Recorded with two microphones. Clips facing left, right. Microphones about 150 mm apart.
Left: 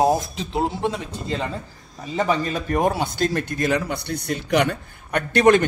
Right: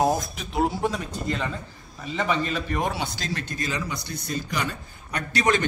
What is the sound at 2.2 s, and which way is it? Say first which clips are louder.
A man's voice: left 4 dB; 45° left (ahead or behind).